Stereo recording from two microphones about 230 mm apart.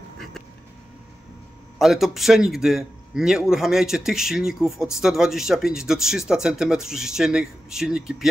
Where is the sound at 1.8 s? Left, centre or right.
Centre.